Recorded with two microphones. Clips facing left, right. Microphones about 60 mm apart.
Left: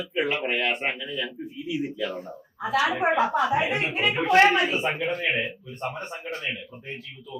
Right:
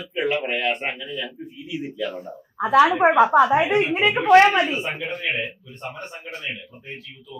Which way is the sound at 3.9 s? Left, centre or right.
Right.